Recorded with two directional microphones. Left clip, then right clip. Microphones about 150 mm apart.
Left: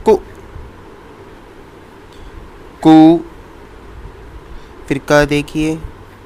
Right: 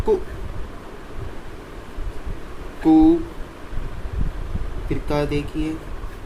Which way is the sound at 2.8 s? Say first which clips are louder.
Left 8 dB; 70° left (ahead or behind).